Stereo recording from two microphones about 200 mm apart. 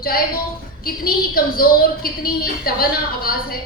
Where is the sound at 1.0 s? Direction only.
45° left (ahead or behind).